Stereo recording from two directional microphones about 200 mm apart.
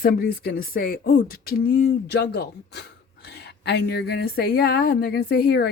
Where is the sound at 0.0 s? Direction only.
50° left (ahead or behind).